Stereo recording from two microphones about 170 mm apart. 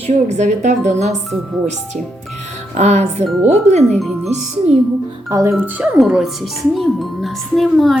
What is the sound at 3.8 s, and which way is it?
Speech, centre (ahead or behind).